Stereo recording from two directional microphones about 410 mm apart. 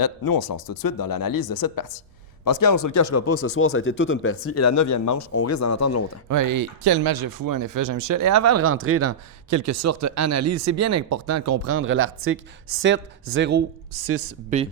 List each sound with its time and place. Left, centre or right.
0.0 s speech: left
6.2 s speech: right